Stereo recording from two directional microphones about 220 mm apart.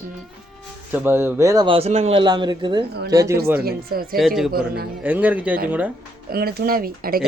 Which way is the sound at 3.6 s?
45° right (ahead or behind).